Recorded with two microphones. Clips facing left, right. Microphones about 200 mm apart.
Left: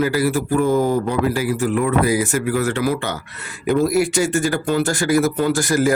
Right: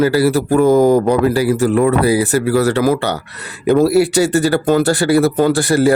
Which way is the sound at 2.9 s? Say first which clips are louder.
Right 6 dB; 70° right (ahead or behind).